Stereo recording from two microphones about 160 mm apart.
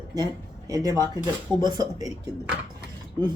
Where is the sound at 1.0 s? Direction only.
25° right (ahead or behind).